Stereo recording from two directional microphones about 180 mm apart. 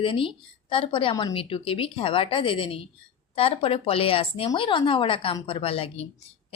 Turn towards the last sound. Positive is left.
turn(degrees=30)  # may be behind; listen again after turning